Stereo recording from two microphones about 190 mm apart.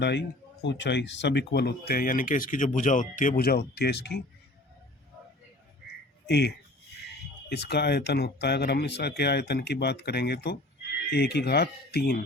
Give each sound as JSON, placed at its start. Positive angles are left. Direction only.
{"t": 0.0, "sound": "speech", "side_deg": 65}
{"t": 6.2, "sound": "speech", "side_deg": 60}
{"t": 7.5, "sound": "speech", "side_deg": 60}